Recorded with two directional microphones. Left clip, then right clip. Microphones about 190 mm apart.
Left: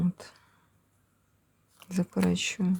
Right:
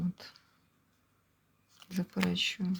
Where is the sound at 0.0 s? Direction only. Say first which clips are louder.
Left 6 dB; 30° left (ahead or behind).